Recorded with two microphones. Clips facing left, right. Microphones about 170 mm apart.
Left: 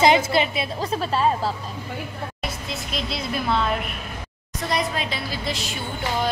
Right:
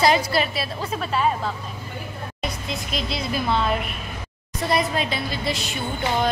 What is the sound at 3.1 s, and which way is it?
A woman's voice, centre (ahead or behind).